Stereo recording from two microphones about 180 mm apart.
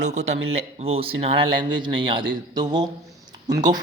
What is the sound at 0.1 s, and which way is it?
Speech, 40° right (ahead or behind).